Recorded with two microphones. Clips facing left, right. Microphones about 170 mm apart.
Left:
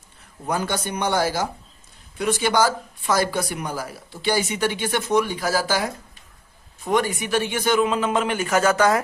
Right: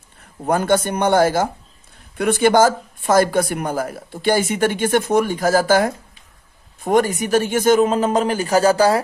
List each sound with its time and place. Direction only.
0.4 s speech: 50° right (ahead or behind); by 9.0 s 35° right (ahead or behind)